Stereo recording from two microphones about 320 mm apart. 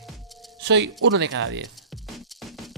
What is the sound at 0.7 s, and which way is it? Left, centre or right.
Speech, right.